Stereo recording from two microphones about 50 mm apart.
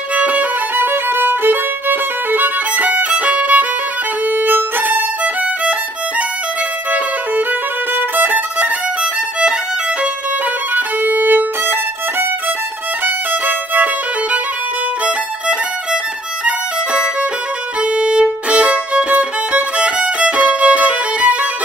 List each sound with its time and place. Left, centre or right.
0.1 s violin: right
0.7 s violin: right
7.9 s violin: right
10.7 s violin: right
13.0 s violin: right
16.4 s violin: right